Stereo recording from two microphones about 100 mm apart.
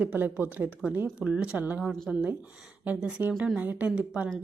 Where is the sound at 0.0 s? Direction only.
20° right (ahead or behind).